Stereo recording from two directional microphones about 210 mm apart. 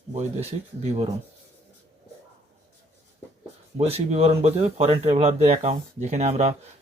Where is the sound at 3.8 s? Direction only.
30° right (ahead or behind).